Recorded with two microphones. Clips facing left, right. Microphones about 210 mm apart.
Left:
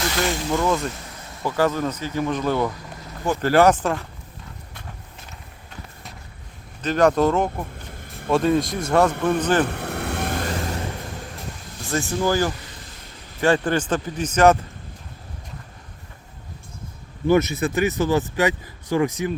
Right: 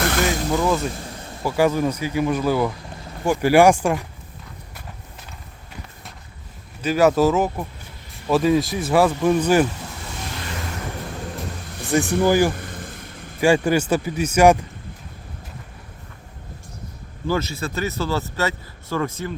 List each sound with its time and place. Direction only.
0.3 s speech: 5° right (ahead or behind)
6.8 s speech: 5° right (ahead or behind)
9.6 s vehicle: 60° left (ahead or behind)
11.9 s speech: 15° right (ahead or behind)
12.5 s vehicle: 55° right (ahead or behind)
13.4 s speech: 10° right (ahead or behind)
17.2 s speech: 20° left (ahead or behind)